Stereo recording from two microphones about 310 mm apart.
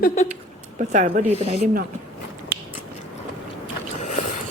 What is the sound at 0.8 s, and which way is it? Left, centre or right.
Speech, right.